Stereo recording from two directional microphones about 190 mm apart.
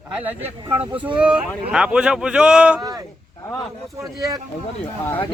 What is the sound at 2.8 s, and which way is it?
Speech, 20° right (ahead or behind).